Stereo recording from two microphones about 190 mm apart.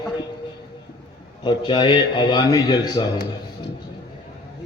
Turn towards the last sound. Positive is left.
turn(degrees=20)  # may be behind; listen again after turning